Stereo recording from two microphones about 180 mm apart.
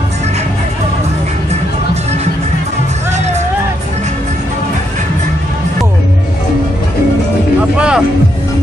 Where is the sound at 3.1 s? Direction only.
40° right (ahead or behind).